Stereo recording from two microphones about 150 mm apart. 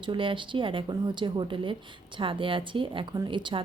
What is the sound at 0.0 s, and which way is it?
A woman's voice, 35° right (ahead or behind).